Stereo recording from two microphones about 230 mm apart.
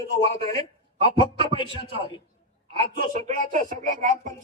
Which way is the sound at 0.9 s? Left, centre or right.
Right.